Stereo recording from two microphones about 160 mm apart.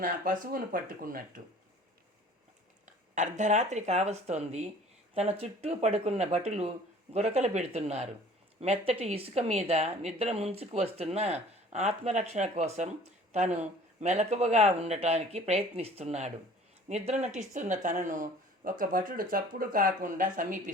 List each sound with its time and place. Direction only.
0.5 s speech: 60° right (ahead or behind)
2.8 s a woman's voice: 50° right (ahead or behind)